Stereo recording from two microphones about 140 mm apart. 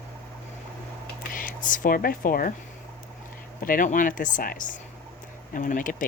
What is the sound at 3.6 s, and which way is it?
Speech, 75° left (ahead or behind).